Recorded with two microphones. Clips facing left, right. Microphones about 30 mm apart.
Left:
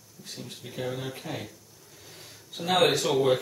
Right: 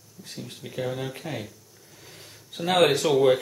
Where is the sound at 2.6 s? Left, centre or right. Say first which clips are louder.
Right 3 dB; right.